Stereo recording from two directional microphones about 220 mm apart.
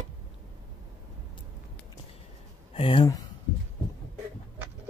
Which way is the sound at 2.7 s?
25° left (ahead or behind).